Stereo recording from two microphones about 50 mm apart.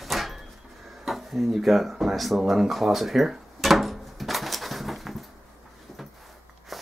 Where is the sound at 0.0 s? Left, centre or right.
Centre.